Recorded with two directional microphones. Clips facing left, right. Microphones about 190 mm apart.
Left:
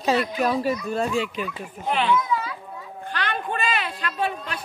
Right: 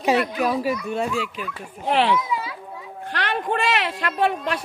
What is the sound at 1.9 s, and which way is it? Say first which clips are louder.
A child's voice: right 2 dB; 80° right.